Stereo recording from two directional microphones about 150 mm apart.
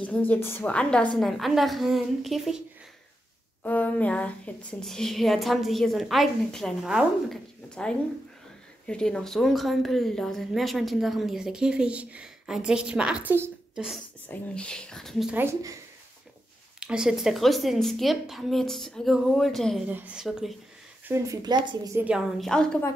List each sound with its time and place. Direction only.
0.0 s a woman's voice: 10° left (ahead or behind)
3.6 s a woman's voice: 10° left (ahead or behind); by 13.8 s 10° right (ahead or behind)
14.2 s a woman's voice: 10° left (ahead or behind)
15.3 s a woman's voice: 20° right (ahead or behind)
16.8 s a woman's voice: 5° right (ahead or behind)
19.9 s a woman's voice: 10° right (ahead or behind)
21.1 s a woman's voice: 25° right (ahead or behind)
21.9 s a woman's voice: 10° right (ahead or behind)
22.4 s a woman's voice: 5° left (ahead or behind)